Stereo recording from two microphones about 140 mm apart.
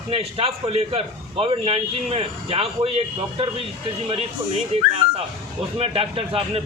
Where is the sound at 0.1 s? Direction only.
45° right (ahead or behind).